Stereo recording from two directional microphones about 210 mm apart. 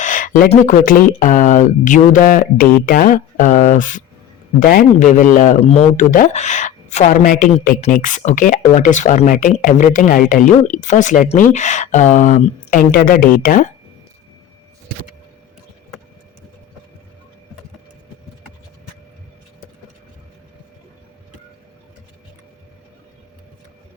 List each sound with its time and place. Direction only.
0.0 s speech: 40° left (ahead or behind)